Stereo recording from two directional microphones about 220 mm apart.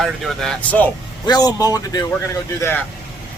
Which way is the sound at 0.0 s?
5° left (ahead or behind).